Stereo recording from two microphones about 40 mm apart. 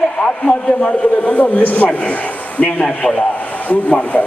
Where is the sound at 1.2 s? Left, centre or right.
Left.